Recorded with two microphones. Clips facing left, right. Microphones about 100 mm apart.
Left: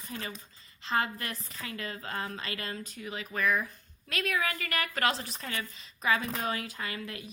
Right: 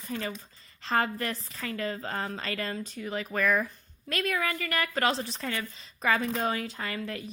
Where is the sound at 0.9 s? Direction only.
40° right (ahead or behind).